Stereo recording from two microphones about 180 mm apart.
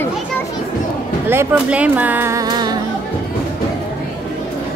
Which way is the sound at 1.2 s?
10° right (ahead or behind).